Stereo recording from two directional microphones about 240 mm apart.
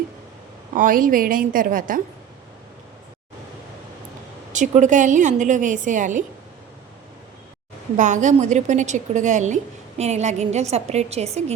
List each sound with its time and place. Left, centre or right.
0.7 s a woman's voice: right
4.5 s a woman's voice: right
7.9 s a woman's voice: right